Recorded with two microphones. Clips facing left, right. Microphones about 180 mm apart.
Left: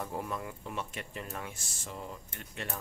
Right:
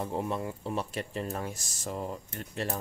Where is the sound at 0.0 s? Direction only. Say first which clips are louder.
Right 5 dB; 25° right (ahead or behind).